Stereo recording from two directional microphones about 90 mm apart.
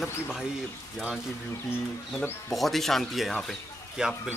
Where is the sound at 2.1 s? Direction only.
Centre (ahead or behind).